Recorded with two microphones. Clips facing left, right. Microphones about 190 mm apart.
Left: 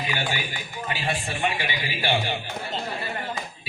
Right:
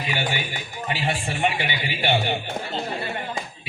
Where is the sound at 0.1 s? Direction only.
25° right (ahead or behind).